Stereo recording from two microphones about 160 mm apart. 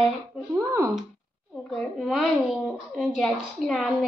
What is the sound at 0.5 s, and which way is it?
Speech, 20° right (ahead or behind).